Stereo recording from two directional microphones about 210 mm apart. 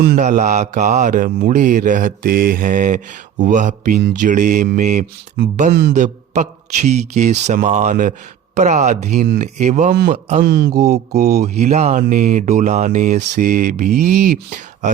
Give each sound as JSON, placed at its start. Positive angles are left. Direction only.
{"t": 0.2, "sound": "speech", "side_deg": -35}
{"t": 10.1, "sound": "speech", "side_deg": -30}
{"t": 10.4, "sound": "mantra", "side_deg": -50}
{"t": 11.2, "sound": "speech", "side_deg": -35}